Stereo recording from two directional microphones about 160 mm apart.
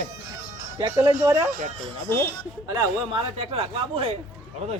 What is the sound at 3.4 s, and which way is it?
Speech, 35° right (ahead or behind).